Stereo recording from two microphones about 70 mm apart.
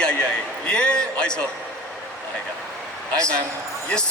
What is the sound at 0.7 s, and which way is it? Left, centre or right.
Speech, centre.